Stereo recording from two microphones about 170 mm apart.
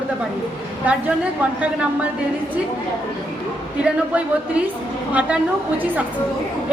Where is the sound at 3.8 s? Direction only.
5° right (ahead or behind).